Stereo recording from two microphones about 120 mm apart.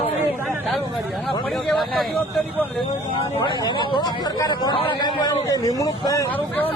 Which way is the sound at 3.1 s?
50° left (ahead or behind).